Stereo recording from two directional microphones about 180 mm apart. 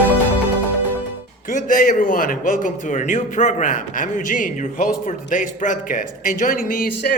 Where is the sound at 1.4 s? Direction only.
50° left (ahead or behind).